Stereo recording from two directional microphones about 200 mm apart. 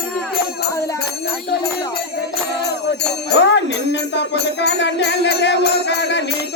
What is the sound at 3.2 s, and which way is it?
Music, 55° left (ahead or behind).